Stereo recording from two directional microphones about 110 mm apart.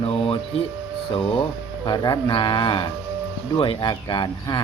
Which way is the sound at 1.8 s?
45° left (ahead or behind).